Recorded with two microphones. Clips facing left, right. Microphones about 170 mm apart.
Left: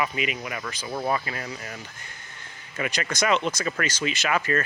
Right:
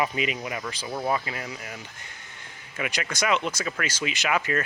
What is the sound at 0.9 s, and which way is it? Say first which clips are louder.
Speech: left 1 dB; 10° right (ahead or behind).